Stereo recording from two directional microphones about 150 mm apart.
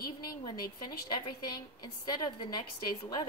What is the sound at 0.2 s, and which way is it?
A woman's voice, 30° left (ahead or behind).